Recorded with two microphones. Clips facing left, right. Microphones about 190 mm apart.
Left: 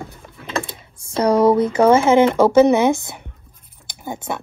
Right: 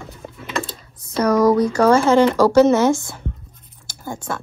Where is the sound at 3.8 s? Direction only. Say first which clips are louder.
Left 1 dB; 20° left (ahead or behind).